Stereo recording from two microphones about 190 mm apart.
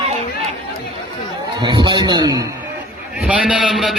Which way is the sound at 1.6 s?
25° right (ahead or behind).